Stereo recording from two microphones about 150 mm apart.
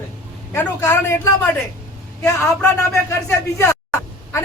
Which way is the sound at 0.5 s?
15° left (ahead or behind).